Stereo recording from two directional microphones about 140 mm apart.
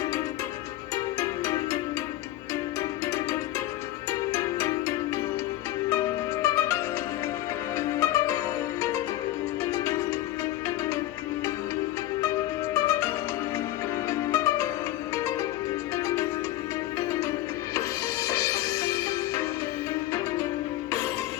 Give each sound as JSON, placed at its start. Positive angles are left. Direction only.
{"t": 1.2, "sound": "music", "side_deg": 20}
{"t": 4.3, "sound": "music", "side_deg": 20}
{"t": 6.4, "sound": "music", "side_deg": 20}
{"t": 9.7, "sound": "music", "side_deg": 20}
{"t": 12.7, "sound": "music", "side_deg": 20}
{"t": 14.1, "sound": "music", "side_deg": 20}
{"t": 18.3, "sound": "music", "side_deg": 20}